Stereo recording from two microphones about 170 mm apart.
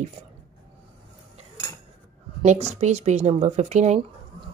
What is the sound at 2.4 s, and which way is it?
Speech, 40° right (ahead or behind).